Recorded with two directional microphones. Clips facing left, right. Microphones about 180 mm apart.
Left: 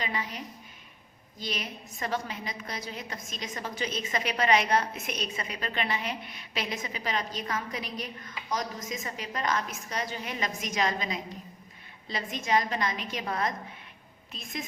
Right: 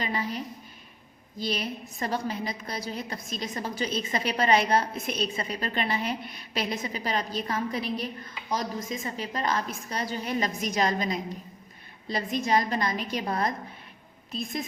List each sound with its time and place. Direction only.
0.0 s a woman's voice: 35° right (ahead or behind)
1.4 s a woman's voice: 35° right (ahead or behind)